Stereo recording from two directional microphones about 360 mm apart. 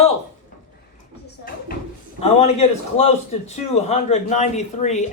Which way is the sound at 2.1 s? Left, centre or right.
Centre.